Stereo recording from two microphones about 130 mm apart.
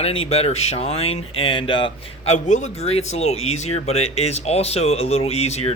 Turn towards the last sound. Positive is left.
turn(degrees=55)  # may be behind; listen again after turning